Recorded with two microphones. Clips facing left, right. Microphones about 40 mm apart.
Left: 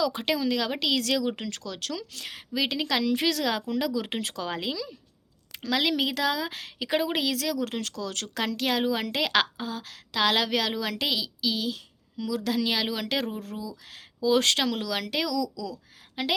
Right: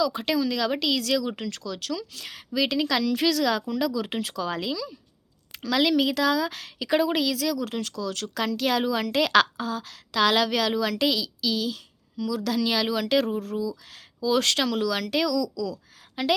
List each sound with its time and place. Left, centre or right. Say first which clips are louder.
0.0 s a woman's voice: right 2 dB; left
0.7 s a woman's voice: right 2 dB; centre
0.9 s speech: right 1 dB; left
2.5 s a woman's voice: right 3 dB; centre; by 4.5 s left
4.5 s a woman's voice: right 2 dB; left
5.7 s a woman's voice: right 4 dB; centre
7.7 s speech: right 2 dB; left
8.6 s a woman's voice: right 2 dB; centre; by 14.6 s left
14.6 s a woman's voice: right 3 dB; left